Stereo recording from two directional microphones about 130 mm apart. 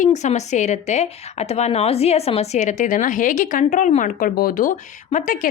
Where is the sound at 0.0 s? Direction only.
60° left (ahead or behind).